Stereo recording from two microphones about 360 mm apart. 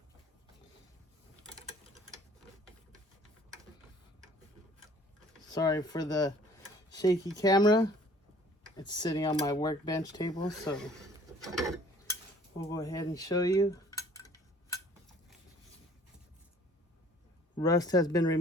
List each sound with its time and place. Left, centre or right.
5.5 s speech: centre
12.7 s cutlery: centre
17.6 s speech: centre